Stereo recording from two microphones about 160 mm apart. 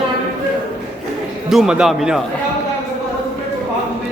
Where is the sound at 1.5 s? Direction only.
5° right (ahead or behind).